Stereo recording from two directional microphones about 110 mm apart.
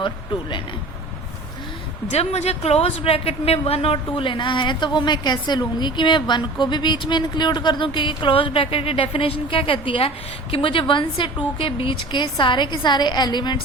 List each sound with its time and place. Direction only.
2.0 s a woman's voice: 75° left (ahead or behind); by 13.6 s 40° left (ahead or behind)